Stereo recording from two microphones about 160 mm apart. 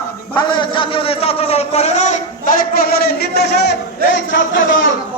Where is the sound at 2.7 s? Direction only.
70° left (ahead or behind); by 4.2 s 90° left.